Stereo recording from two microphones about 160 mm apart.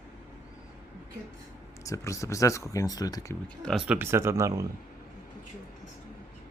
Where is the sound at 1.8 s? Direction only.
20° left (ahead or behind).